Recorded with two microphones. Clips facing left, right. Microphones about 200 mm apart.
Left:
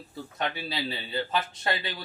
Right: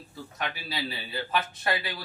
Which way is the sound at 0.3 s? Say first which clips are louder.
Left 3 dB; 25° left (ahead or behind).